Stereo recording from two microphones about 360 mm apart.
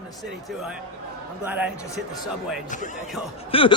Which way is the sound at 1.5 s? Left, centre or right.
Centre.